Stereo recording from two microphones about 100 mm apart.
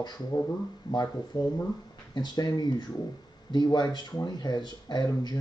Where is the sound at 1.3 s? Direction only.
40° left (ahead or behind).